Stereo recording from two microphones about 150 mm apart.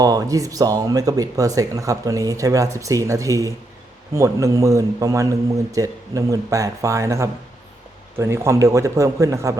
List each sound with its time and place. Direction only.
0.0 s speech: 25° right (ahead or behind)